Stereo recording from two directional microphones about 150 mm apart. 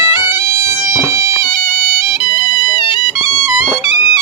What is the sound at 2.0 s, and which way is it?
Music, 35° left (ahead or behind).